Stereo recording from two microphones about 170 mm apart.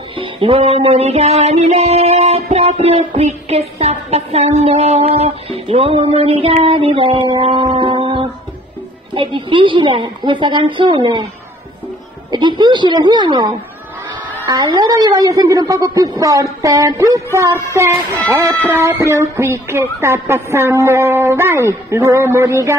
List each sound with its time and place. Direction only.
0.2 s music: 35° right (ahead or behind)
9.1 s a woman's voice: 30° right (ahead or behind)
12.3 s a woman's voice: 25° right (ahead or behind)
18.7 s child singing: 15° right (ahead or behind)